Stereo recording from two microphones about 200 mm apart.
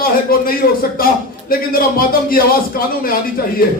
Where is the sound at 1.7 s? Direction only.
45° left (ahead or behind).